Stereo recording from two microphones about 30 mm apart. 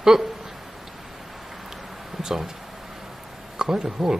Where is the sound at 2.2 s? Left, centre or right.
Centre.